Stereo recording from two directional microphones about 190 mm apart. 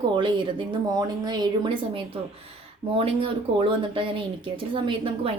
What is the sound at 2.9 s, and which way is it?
A woman's voice, 30° right (ahead or behind).